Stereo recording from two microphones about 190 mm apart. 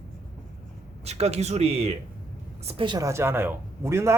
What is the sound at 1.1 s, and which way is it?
Speech, 35° right (ahead or behind).